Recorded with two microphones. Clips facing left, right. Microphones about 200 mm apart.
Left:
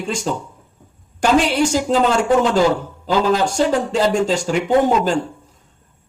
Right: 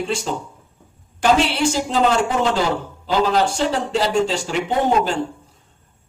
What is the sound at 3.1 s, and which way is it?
A man's voice, 45° left (ahead or behind).